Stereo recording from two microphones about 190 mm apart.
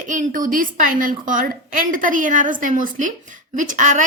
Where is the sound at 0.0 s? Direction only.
40° right (ahead or behind).